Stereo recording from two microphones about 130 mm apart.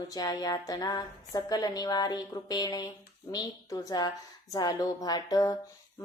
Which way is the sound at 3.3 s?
30° left (ahead or behind).